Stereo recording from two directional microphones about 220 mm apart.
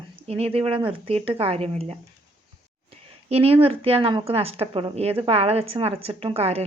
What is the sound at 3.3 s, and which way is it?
A woman's voice, 25° right (ahead or behind).